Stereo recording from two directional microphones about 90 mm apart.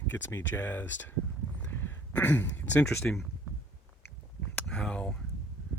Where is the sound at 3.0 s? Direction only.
15° left (ahead or behind).